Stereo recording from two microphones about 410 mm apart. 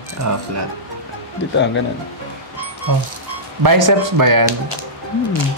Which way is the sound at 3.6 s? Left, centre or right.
Right.